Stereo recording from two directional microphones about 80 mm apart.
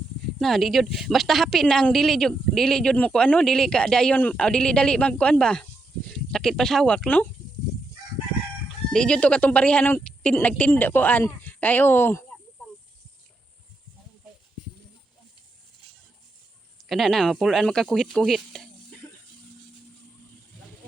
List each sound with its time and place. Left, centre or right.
0.3 s a woman's voice: centre
8.9 s a woman's voice: centre; by 12.2 s left
16.9 s a woman's voice: centre
18.3 s a sound: centre